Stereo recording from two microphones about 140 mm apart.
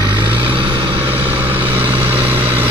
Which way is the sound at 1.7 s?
15° right (ahead or behind).